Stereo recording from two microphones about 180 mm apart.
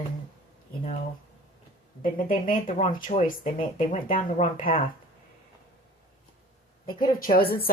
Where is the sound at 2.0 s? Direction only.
50° left (ahead or behind).